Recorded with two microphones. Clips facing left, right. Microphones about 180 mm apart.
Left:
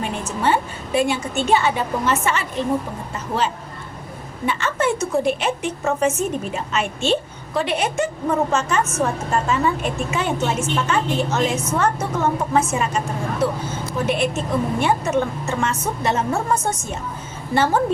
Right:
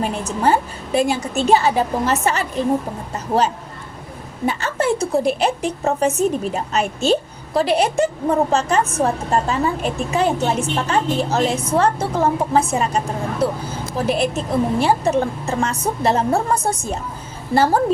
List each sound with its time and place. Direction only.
0.0 s a woman's voice: 40° right (ahead or behind)